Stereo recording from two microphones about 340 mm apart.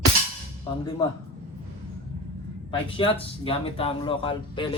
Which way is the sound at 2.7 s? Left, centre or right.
Centre.